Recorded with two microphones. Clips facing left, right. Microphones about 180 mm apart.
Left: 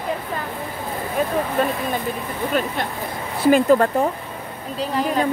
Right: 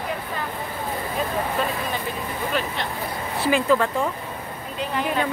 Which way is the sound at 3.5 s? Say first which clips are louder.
Left 5 dB; 45° left (ahead or behind).